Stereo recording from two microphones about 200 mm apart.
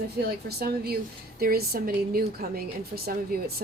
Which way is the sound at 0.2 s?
55° right (ahead or behind).